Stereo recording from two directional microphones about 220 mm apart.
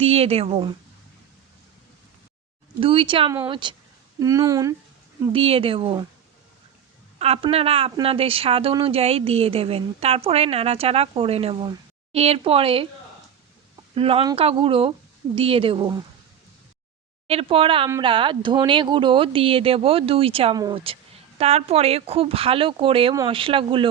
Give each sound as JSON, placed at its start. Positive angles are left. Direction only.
{"t": 0.0, "sound": "speech", "side_deg": -25}
{"t": 2.8, "sound": "speech", "side_deg": -25}
{"t": 7.2, "sound": "speech", "side_deg": -25}
{"t": 13.9, "sound": "speech", "side_deg": -25}
{"t": 17.2, "sound": "speech", "side_deg": -25}